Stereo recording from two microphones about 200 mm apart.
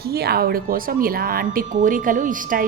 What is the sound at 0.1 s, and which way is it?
A woman's voice, 50° right (ahead or behind).